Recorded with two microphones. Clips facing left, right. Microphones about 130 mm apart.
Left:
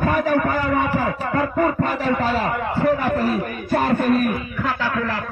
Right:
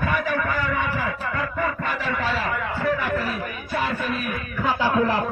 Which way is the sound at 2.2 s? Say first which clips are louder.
Left 4 dB; 40° left (ahead or behind).